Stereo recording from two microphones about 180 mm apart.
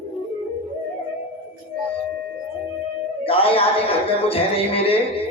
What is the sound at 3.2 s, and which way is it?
Speech, 30° left (ahead or behind).